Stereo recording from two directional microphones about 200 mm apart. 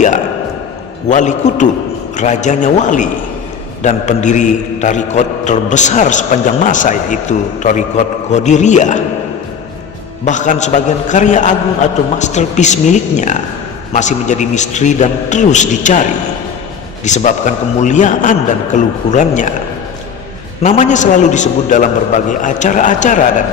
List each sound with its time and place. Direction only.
1.0 s a man's voice: 35° left (ahead or behind)
10.2 s a man's voice: 40° left (ahead or behind)
20.6 s a man's voice: 35° left (ahead or behind)